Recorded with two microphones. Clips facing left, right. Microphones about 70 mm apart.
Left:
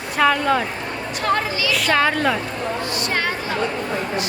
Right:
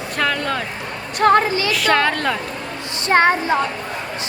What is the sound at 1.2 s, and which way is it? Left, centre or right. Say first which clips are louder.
Speech: right 7 dB; right.